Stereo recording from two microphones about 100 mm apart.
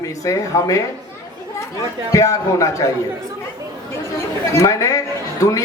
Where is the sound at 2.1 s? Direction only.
35° left (ahead or behind).